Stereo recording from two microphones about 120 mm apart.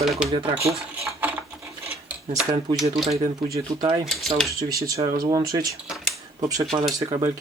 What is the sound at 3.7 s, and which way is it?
Speech, 30° right (ahead or behind).